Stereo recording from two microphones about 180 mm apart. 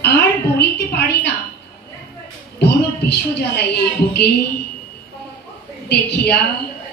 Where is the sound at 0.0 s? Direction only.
65° left (ahead or behind).